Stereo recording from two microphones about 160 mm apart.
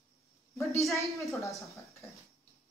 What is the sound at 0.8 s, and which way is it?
Speech, 20° left (ahead or behind).